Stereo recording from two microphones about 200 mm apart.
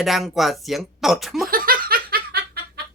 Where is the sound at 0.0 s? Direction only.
Centre (ahead or behind).